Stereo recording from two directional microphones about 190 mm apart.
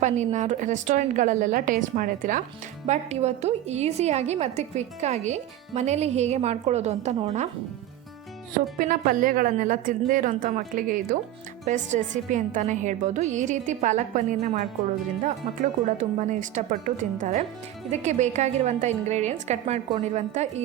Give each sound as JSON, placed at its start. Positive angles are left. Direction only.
{"t": 0.0, "sound": "a woman's voice", "side_deg": -40}
{"t": 8.8, "sound": "a woman's voice", "side_deg": -45}